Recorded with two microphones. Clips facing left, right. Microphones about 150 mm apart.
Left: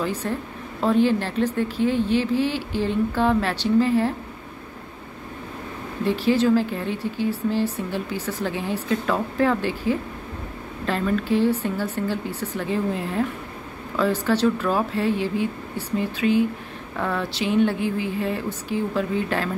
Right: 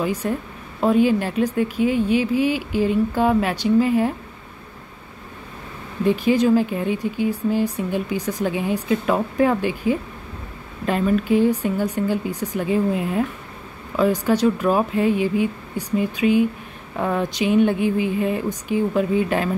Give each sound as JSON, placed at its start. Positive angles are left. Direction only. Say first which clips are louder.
{"t": 0.0, "sound": "a woman's voice", "louder": "right 3 dB", "side_deg": -10}
{"t": 6.0, "sound": "a woman's voice", "louder": "right 2 dB", "side_deg": -15}